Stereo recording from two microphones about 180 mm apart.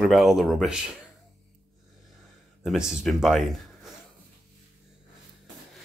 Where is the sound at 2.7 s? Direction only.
5° right (ahead or behind).